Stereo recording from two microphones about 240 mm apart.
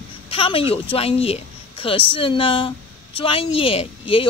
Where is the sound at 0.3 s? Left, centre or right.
Left.